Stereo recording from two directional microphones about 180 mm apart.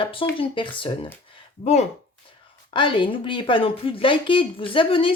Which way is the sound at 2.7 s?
25° left (ahead or behind).